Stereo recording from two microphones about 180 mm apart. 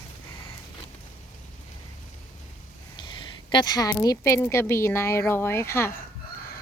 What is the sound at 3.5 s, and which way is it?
Speech, 25° left (ahead or behind).